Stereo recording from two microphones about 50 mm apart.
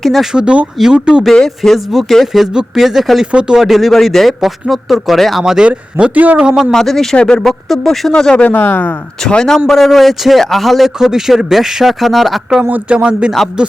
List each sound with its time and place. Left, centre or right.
0.0 s speech: centre
0.3 s speech: right
1.2 s speech: centre
2.2 s speech: centre
5.4 s speech: centre
6.0 s speech: right
6.3 s speech: right
6.7 s speech: centre
7.4 s speech: centre
8.4 s speech: left
9.3 s speech: centre
9.6 s speech: centre
12.6 s speech: right
13.0 s speech: right